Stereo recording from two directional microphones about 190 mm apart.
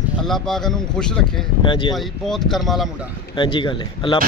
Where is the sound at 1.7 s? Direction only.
25° left (ahead or behind).